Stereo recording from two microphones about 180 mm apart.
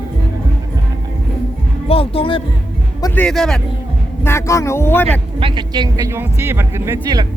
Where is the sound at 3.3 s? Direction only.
5° left (ahead or behind).